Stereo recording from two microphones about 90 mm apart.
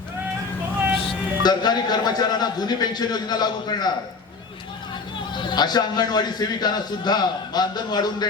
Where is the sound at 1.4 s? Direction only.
50° left (ahead or behind).